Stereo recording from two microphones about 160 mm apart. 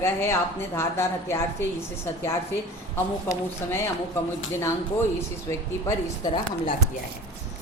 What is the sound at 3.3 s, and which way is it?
Speech, 15° left (ahead or behind).